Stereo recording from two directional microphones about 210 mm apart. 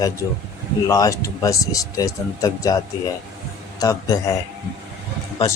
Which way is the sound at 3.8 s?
15° left (ahead or behind).